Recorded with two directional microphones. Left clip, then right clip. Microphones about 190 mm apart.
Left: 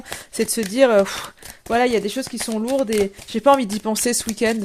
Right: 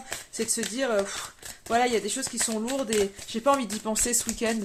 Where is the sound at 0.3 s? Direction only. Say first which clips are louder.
Left 12 dB; 45° left (ahead or behind).